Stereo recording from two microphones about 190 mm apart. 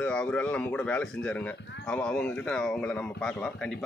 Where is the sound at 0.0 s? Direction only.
5° left (ahead or behind).